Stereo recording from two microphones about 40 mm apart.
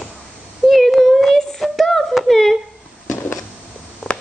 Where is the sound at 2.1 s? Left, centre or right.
Centre.